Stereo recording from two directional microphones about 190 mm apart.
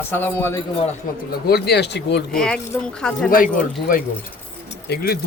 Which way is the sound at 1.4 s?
60° left (ahead or behind).